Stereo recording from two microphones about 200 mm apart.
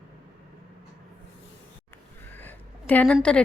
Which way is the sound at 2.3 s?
10° left (ahead or behind).